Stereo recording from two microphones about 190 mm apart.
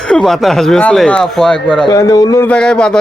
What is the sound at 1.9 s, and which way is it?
Speech, 20° left (ahead or behind).